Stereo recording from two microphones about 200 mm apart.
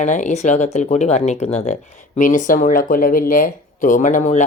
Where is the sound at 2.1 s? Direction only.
40° left (ahead or behind).